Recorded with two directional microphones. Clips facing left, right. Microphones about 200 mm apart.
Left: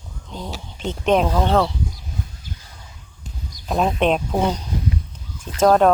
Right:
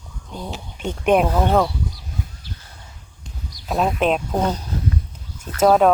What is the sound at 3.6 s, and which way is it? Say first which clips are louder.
Speech: left 1 dB; centre (ahead or behind).